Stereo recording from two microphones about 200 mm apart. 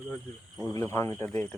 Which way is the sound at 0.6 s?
15° left (ahead or behind).